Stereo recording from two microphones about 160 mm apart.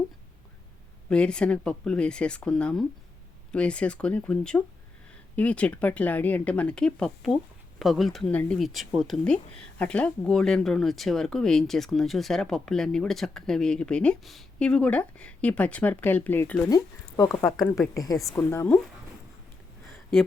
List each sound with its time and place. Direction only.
1.1 s speech: 5° left (ahead or behind)
16.6 s a woman's voice: 20° left (ahead or behind)